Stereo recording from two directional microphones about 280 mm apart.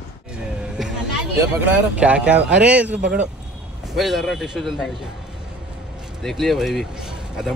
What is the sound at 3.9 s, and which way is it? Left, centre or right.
Speech, centre.